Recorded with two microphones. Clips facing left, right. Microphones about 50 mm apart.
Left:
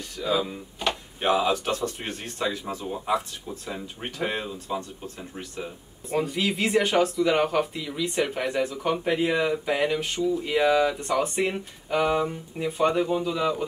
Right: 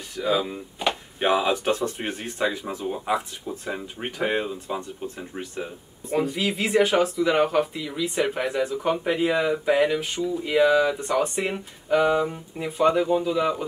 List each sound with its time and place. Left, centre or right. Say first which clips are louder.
0.2 s speech: right 2 dB; centre
6.1 s speech: right 1 dB; centre